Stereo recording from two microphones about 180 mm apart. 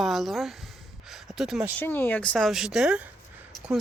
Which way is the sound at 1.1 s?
Centre (ahead or behind).